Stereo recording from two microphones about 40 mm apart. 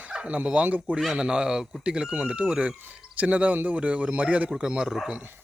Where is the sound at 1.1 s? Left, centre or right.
Right.